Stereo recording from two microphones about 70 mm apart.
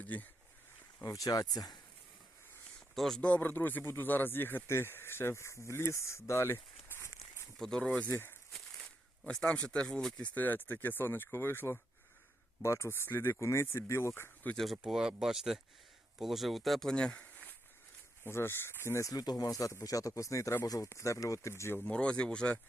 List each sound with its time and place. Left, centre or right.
0.0 s speech: left
1.0 s speech: left
2.9 s speech: centre
3.2 s speech: centre; by 7.4 s left
7.6 s speech: centre
7.9 s speech: left
9.2 s speech: centre
10.2 s speech: left
14.5 s speech: centre
17.2 s a sound: left
18.3 s speech: left
19.0 s speech: left
20.9 s speech: left
21.8 s speech: centre